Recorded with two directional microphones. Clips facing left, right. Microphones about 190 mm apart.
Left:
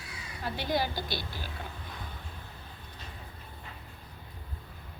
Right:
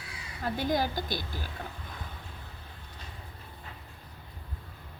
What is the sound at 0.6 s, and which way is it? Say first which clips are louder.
Speech: right 1 dB; 45° right (ahead or behind).